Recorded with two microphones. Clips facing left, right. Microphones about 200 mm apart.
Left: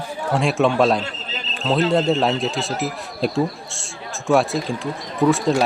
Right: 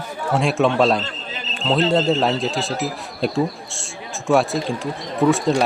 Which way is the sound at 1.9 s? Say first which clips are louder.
Even; centre (ahead or behind).